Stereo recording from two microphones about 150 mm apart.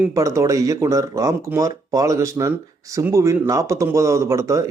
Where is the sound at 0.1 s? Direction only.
20° right (ahead or behind).